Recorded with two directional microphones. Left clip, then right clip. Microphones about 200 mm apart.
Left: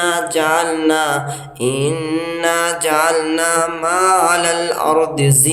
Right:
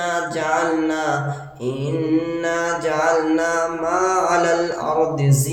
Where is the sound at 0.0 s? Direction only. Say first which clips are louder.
Left 6 dB; 45° left (ahead or behind).